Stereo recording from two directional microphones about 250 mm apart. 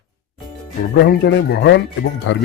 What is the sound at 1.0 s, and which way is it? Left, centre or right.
Speech, left.